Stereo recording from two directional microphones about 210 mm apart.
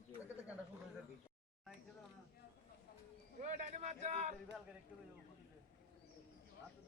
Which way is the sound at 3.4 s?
35° right (ahead or behind).